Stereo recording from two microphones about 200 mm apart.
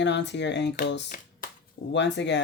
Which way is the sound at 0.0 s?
60° left (ahead or behind).